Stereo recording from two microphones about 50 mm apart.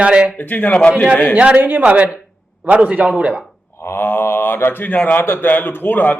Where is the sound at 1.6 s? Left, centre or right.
Right.